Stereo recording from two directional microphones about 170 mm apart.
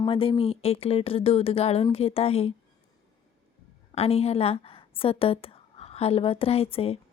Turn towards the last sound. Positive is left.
turn(degrees=35)  # may be behind; listen again after turning